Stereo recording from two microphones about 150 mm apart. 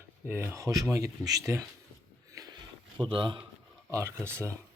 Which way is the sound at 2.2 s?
20° right (ahead or behind).